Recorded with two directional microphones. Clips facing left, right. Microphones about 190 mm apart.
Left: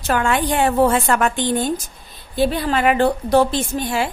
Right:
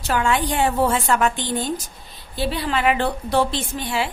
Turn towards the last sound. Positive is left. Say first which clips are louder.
# left 4 dB
turn(degrees=45)  # may be behind; listen again after turning